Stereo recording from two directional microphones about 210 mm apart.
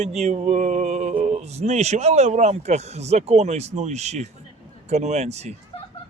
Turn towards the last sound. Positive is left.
turn(degrees=-30)  # may be behind; listen again after turning